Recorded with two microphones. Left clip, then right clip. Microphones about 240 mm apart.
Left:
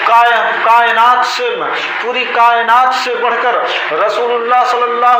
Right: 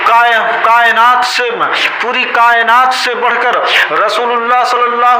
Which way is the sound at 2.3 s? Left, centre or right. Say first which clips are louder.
Right 1 dB; right.